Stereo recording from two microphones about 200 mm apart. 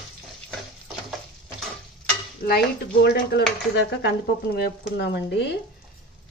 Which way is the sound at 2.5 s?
50° left (ahead or behind).